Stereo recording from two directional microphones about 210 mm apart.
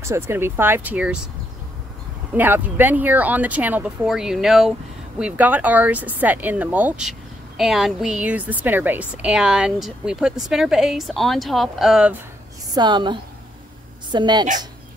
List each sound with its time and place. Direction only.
0.0 s speech: 10° right (ahead or behind)
2.3 s speech: 10° right (ahead or behind)
12.7 s a woman's voice: 20° right (ahead or behind)